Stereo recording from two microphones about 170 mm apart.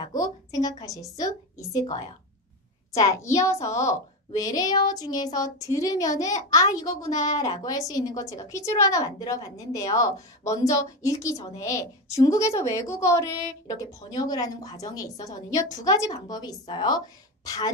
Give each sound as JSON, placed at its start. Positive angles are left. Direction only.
{"t": 0.0, "sound": "a woman's voice", "side_deg": 20}